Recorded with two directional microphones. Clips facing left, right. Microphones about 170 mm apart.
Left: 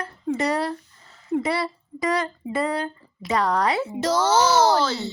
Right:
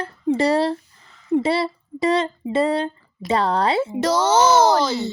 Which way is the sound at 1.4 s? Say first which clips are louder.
Right 4 dB; 25° right (ahead or behind).